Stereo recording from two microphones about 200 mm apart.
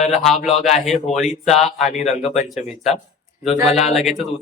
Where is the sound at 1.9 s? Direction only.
35° left (ahead or behind).